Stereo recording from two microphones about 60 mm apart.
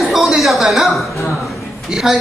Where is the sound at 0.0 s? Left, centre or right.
Centre.